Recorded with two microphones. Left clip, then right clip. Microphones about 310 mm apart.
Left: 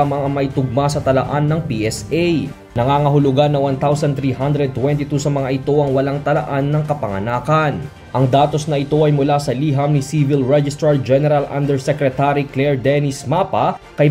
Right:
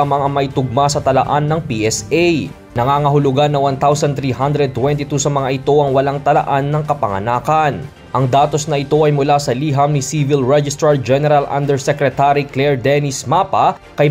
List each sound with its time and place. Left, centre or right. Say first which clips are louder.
0.1 s a man's voice: right 4 dB; centre